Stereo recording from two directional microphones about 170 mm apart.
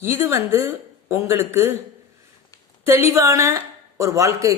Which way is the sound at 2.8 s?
15° right (ahead or behind).